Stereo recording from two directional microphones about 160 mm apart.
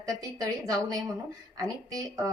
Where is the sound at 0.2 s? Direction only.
20° right (ahead or behind).